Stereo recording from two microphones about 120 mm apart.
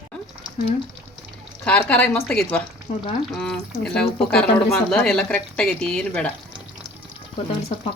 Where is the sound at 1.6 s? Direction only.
10° left (ahead or behind).